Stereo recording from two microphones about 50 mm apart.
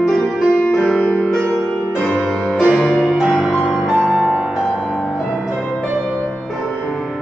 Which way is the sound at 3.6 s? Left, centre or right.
Centre.